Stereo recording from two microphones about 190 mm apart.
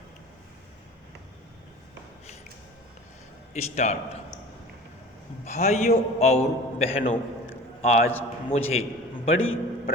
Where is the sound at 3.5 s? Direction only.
35° left (ahead or behind).